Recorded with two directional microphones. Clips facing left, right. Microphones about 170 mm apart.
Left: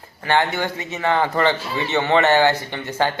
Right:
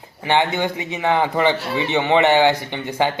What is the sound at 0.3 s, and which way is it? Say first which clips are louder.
A man's voice: right 1 dB; 15° right (ahead or behind).